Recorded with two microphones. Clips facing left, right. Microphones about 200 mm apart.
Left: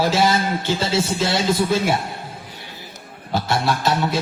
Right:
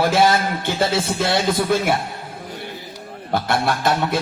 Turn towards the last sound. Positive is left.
turn(degrees=-55)  # may be behind; listen again after turning